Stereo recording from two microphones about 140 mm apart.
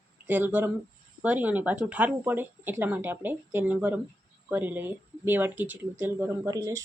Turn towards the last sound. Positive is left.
turn(degrees=-25)  # may be behind; listen again after turning